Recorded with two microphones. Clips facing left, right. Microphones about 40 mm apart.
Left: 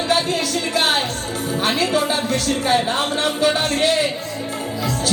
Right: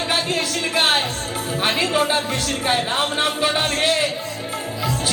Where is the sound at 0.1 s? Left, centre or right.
Right.